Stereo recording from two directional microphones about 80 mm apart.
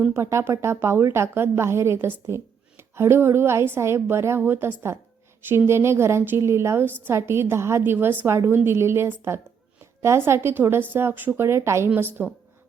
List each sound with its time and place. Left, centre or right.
0.1 s a woman's voice: right